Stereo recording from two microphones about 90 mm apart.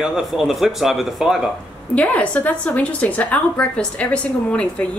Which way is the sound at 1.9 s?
15° left (ahead or behind).